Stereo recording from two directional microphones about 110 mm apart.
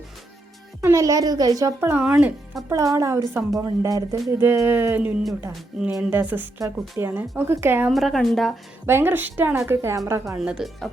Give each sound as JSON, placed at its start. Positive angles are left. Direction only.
{"t": 0.8, "sound": "a child's voice", "side_deg": -30}
{"t": 1.8, "sound": "a woman's voice", "side_deg": -20}
{"t": 2.0, "sound": "speech", "side_deg": -5}
{"t": 2.6, "sound": "a woman's voice", "side_deg": -30}
{"t": 7.9, "sound": "a woman's voice", "side_deg": 0}
{"t": 8.9, "sound": "a woman's voice", "side_deg": -20}
{"t": 10.3, "sound": "speech", "side_deg": -5}